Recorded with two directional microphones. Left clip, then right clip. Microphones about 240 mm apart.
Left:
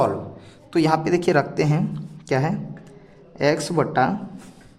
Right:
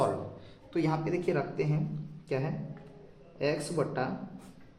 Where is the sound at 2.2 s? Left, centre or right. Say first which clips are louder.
Left 11 dB; left.